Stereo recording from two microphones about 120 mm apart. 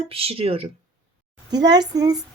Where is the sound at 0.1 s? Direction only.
55° right (ahead or behind).